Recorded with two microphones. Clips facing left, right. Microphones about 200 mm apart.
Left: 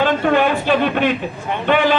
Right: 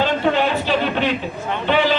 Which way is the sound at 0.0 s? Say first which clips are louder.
Left 3 dB; 55° left (ahead or behind).